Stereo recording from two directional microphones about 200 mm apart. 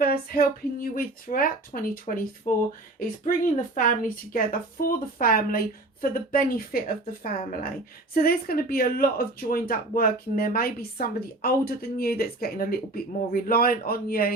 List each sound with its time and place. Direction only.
0.0 s speech: 50° left (ahead or behind)
3.8 s speech: 45° left (ahead or behind)